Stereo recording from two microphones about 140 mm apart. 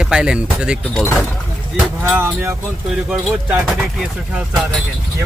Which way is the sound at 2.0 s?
15° right (ahead or behind).